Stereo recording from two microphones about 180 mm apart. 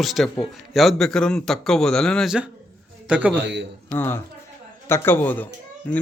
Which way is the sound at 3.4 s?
80° right.